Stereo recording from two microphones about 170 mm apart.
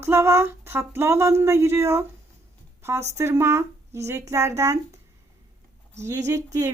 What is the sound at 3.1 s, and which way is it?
Speech, 15° right (ahead or behind).